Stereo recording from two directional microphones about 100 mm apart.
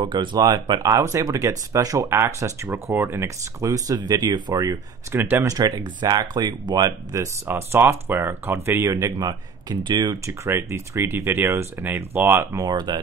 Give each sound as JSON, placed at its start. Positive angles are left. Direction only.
{"t": 0.0, "sound": "speech", "side_deg": -50}
{"t": 5.1, "sound": "speech", "side_deg": -25}
{"t": 5.5, "sound": "speech", "side_deg": -40}
{"t": 7.4, "sound": "speech", "side_deg": -25}
{"t": 10.2, "sound": "speech", "side_deg": -25}
{"t": 12.6, "sound": "speech", "side_deg": -45}